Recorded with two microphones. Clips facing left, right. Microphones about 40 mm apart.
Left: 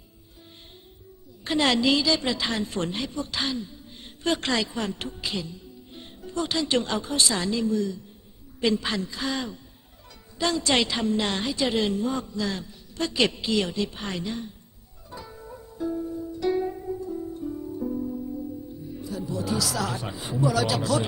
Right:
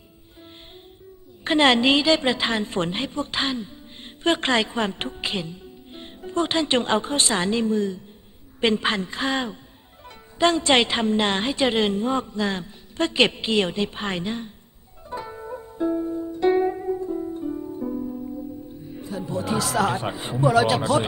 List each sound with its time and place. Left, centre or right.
1.5 s a woman's voice: right
15.1 s music: right
18.9 s speech: right